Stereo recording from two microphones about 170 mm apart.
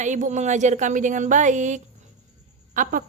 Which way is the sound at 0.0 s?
45° right (ahead or behind).